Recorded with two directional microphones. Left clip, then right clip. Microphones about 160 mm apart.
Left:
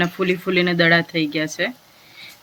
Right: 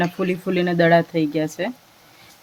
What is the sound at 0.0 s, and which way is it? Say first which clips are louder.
Speech: left 2 dB; 45° right (ahead or behind).